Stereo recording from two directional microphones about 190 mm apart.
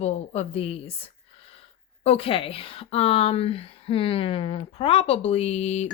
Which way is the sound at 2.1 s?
30° left (ahead or behind).